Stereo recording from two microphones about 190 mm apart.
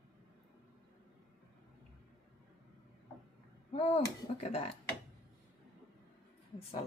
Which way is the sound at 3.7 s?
35° left (ahead or behind).